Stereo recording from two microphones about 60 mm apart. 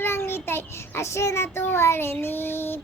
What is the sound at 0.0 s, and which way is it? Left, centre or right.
Child singing, left.